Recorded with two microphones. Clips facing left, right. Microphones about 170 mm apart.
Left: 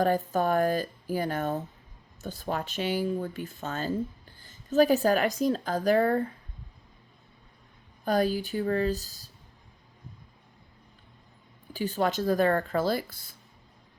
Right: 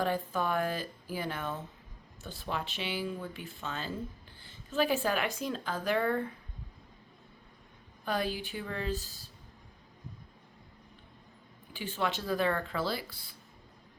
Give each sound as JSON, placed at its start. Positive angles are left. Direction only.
{"t": 0.0, "sound": "speech", "side_deg": 45}
{"t": 8.0, "sound": "speech", "side_deg": 40}
{"t": 11.7, "sound": "speech", "side_deg": 40}